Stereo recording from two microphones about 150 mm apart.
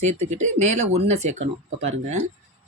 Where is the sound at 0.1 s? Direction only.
50° right (ahead or behind).